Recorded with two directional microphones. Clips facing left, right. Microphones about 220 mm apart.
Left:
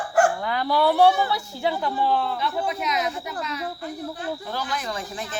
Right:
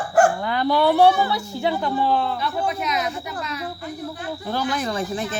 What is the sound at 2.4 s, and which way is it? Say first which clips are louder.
Speech: right 1 dB; 20° left (ahead or behind).